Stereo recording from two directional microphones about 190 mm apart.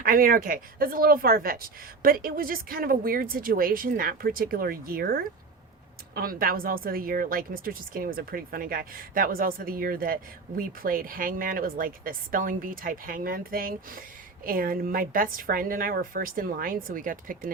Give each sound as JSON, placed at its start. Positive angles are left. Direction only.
{"t": 0.0, "sound": "a woman's voice", "side_deg": -50}